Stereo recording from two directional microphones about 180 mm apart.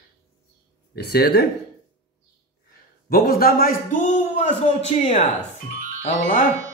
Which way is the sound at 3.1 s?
55° left (ahead or behind).